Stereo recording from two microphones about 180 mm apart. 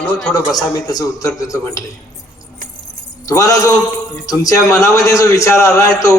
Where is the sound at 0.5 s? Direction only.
20° left (ahead or behind).